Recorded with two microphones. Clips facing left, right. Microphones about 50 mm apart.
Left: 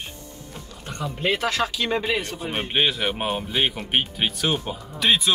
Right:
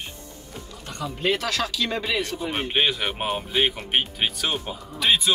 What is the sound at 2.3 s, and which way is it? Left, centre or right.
Speech, centre.